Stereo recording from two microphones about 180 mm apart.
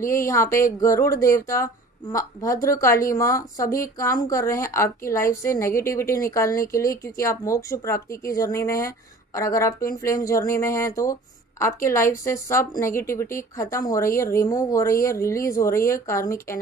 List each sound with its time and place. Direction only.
0.0 s a woman's voice: 15° left (ahead or behind)